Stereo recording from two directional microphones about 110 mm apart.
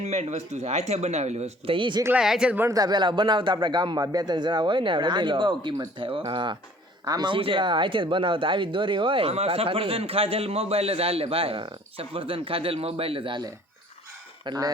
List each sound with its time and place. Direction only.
0.0 s speech: 85° right
1.7 s a man's voice: 50° right (ahead or behind)
2.1 s speech: 5° right (ahead or behind)
2.6 s a man's voice: 35° right (ahead or behind)
7.3 s speech: 50° right (ahead or behind)
14.4 s speech: 35° right (ahead or behind)